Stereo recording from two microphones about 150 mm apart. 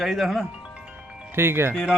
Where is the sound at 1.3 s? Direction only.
15° right (ahead or behind).